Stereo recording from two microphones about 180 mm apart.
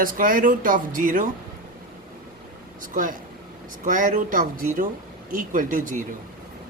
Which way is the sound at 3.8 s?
45° right (ahead or behind).